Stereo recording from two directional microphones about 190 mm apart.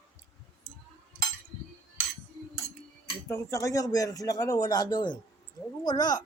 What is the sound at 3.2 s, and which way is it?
A man's voice, 15° left (ahead or behind).